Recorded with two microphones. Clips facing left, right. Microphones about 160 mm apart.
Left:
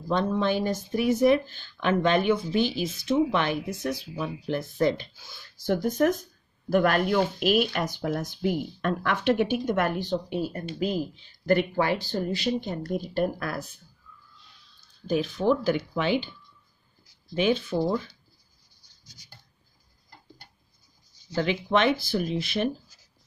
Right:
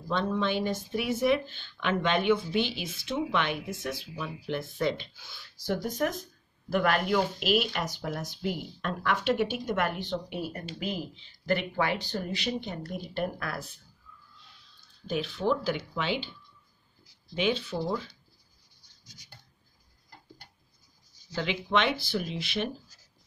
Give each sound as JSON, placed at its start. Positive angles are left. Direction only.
{"t": 0.1, "sound": "speech", "side_deg": 45}
{"t": 10.1, "sound": "speech", "side_deg": 30}
{"t": 10.8, "sound": "speech", "side_deg": 40}
{"t": 15.0, "sound": "speech", "side_deg": 45}
{"t": 21.4, "sound": "speech", "side_deg": 45}